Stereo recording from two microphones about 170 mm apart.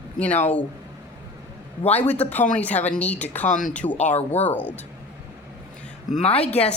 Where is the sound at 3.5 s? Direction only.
50° left (ahead or behind).